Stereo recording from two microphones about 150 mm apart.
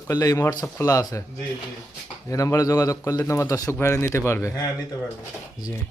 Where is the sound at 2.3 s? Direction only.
20° left (ahead or behind).